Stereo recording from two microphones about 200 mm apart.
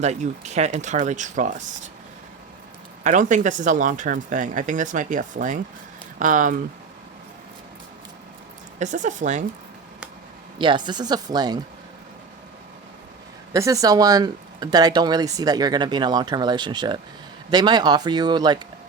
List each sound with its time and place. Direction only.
0.0 s speech: 35° right (ahead or behind)
3.0 s speech: 40° right (ahead or behind)
8.8 s speech: 40° right (ahead or behind)
10.6 s speech: 25° right (ahead or behind)
13.5 s speech: 15° right (ahead or behind)